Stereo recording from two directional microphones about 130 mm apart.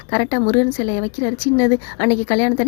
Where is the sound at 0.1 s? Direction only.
35° left (ahead or behind).